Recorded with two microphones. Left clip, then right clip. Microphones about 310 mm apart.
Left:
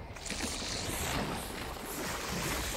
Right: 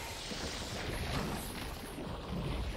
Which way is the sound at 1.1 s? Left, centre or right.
Centre.